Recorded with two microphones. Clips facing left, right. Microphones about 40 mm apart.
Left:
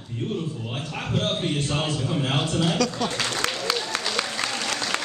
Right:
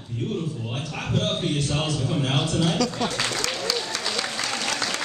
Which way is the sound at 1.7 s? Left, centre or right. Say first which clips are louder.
Even; centre.